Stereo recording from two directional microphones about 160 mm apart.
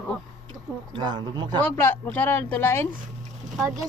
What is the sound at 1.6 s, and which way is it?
Speech, 15° left (ahead or behind).